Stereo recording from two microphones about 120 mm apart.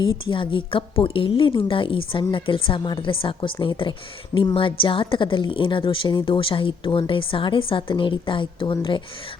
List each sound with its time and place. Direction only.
0.3 s a woman's voice: 45° left (ahead or behind)